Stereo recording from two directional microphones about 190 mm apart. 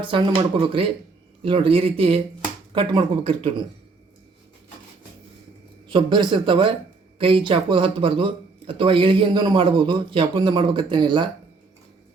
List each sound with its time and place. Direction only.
0.0 s speech: 25° right (ahead or behind)
5.9 s speech: 25° right (ahead or behind)